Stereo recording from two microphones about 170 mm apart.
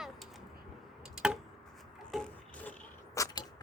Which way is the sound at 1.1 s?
5° right (ahead or behind).